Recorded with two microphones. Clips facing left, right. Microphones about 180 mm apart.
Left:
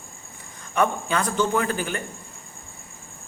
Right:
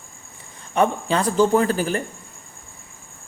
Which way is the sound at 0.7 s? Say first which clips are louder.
Right 3 dB; 30° right (ahead or behind).